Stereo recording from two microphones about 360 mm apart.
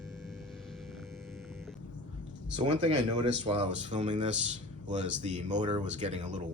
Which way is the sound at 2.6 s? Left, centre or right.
Centre.